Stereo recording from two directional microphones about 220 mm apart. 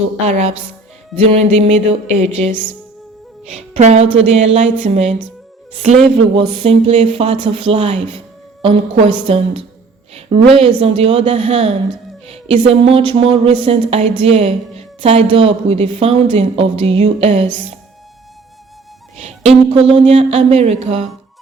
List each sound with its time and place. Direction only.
0.3 s a woman's voice: 30° right (ahead or behind)
19.1 s a woman's voice: 30° right (ahead or behind)